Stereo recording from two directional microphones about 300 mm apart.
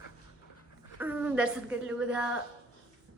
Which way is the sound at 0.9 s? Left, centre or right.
Centre.